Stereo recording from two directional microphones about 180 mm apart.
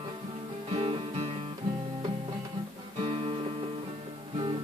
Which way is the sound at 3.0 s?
30° right (ahead or behind).